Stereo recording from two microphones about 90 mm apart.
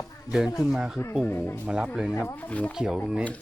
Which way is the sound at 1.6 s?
10° right (ahead or behind).